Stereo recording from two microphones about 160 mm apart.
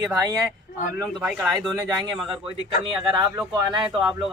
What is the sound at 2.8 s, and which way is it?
Speech, 25° right (ahead or behind).